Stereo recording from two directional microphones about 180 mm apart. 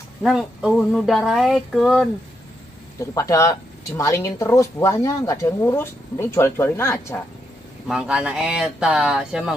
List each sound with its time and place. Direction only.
0.2 s speech: 5° right (ahead or behind)
3.0 s speech: 15° left (ahead or behind)
7.9 s speech: 5° right (ahead or behind)